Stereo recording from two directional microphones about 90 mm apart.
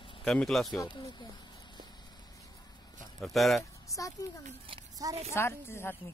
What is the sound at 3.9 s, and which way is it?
Speech, 40° left (ahead or behind).